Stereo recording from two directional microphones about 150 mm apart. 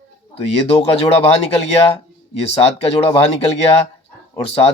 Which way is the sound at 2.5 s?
40° left (ahead or behind).